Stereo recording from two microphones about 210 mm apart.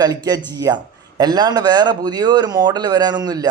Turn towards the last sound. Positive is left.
turn(degrees=-20)  # may be behind; listen again after turning